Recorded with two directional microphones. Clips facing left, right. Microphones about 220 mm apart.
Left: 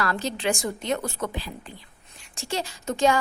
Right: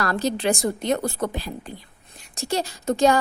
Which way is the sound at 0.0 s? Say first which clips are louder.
Right 4 dB; 40° right (ahead or behind).